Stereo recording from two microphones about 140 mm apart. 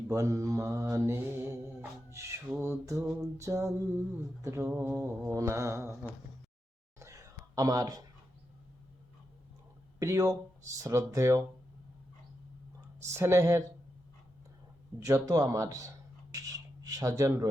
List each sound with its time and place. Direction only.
0.1 s mantra: 25° right (ahead or behind)
2.6 s speech: 20° right (ahead or behind)
7.0 s a sound: 25° right (ahead or behind)
10.0 s speech: 25° right (ahead or behind)
13.0 s speech: 20° right (ahead or behind)
14.9 s speech: 20° right (ahead or behind)
16.3 s a sound: 25° right (ahead or behind)